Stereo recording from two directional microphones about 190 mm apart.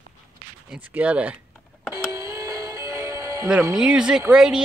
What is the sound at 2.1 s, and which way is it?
Music, 15° right (ahead or behind).